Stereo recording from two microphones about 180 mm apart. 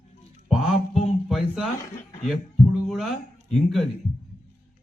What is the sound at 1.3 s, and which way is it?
Speech, centre (ahead or behind).